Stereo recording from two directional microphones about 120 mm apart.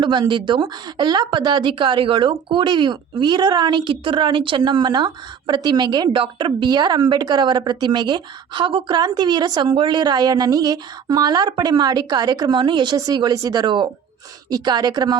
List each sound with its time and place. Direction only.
0.0 s speech: 40° right (ahead or behind)